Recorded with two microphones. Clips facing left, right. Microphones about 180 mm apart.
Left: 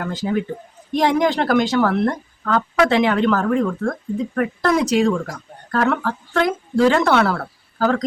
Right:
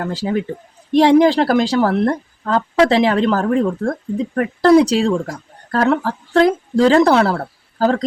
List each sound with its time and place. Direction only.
0.0 s speech: 30° right (ahead or behind)